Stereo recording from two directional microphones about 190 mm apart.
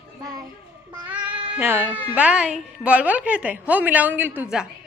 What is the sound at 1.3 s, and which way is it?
Cat, 10° right (ahead or behind).